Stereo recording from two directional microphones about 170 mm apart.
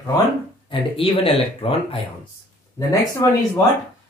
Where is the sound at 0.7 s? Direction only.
30° left (ahead or behind).